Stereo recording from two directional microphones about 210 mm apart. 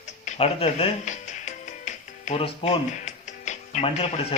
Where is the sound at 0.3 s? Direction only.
30° left (ahead or behind).